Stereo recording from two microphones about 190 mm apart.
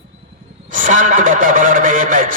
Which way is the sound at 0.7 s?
45° right (ahead or behind).